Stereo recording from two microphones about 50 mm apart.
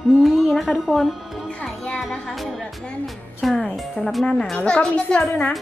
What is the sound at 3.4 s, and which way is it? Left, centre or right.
Speech, centre.